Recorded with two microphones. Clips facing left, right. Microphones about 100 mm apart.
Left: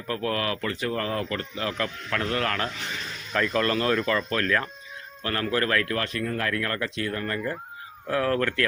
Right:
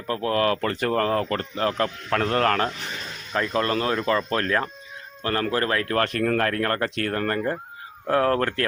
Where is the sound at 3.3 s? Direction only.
25° right (ahead or behind).